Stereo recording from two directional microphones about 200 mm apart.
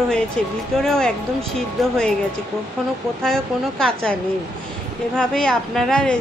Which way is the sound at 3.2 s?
5° left (ahead or behind).